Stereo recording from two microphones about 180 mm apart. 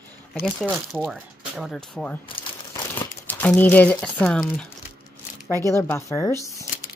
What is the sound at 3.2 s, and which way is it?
Speech, 10° left (ahead or behind).